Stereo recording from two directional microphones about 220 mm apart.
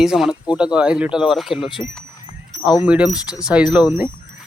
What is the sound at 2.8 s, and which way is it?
Speech, 5° right (ahead or behind).